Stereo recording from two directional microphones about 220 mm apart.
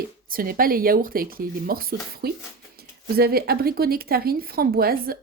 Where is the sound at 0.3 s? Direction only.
40° right (ahead or behind).